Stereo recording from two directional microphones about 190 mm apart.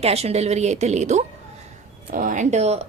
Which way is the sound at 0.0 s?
35° right (ahead or behind).